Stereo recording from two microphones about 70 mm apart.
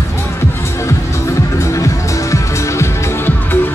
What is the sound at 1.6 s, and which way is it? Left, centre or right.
Music, left.